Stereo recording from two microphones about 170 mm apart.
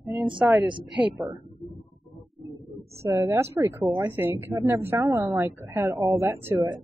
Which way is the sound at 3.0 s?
15° right (ahead or behind).